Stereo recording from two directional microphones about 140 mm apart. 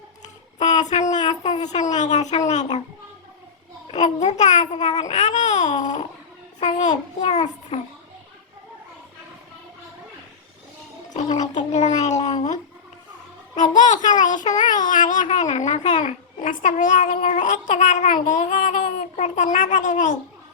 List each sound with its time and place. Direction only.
0.6 s a sound: 55° left (ahead or behind)
1.6 s a child's voice: 55° left (ahead or behind)
3.8 s a child's voice: 55° left (ahead or behind)
11.1 s a child's voice: 55° left (ahead or behind)
13.6 s a child's voice: 60° left (ahead or behind)